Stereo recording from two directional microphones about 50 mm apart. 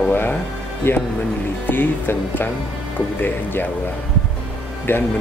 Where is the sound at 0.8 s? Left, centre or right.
Left.